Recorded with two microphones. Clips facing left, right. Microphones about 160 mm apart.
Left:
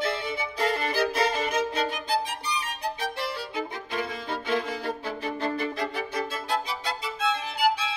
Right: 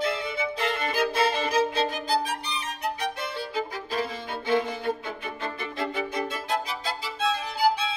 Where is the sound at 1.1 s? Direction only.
30° right (ahead or behind).